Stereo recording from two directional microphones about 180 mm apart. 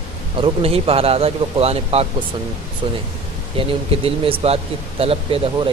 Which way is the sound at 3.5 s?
30° right (ahead or behind).